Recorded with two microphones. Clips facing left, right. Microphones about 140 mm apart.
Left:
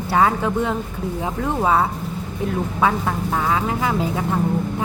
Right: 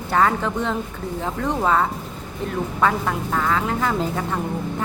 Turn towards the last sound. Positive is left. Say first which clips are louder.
# left 4 dB
turn(degrees=10)  # may be behind; listen again after turning